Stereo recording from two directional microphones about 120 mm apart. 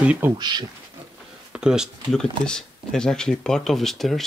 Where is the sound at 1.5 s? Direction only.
5° right (ahead or behind).